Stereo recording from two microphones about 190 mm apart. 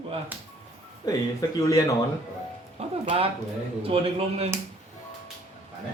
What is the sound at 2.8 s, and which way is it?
Music, 30° right (ahead or behind).